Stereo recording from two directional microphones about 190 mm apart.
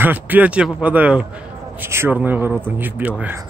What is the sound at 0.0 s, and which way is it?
Speech, 10° right (ahead or behind).